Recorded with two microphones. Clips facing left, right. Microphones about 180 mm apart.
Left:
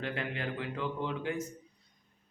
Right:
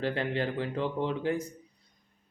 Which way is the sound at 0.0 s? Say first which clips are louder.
Right 6 dB; 35° right (ahead or behind).